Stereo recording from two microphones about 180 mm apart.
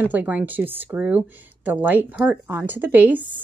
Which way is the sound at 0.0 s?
10° right (ahead or behind).